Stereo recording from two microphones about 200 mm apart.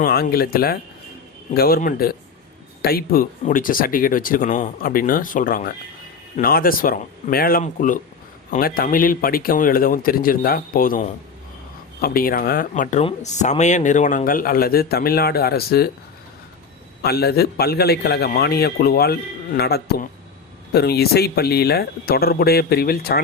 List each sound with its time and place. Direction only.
0.0 s speech: 50° left (ahead or behind)
17.0 s speech: 50° left (ahead or behind)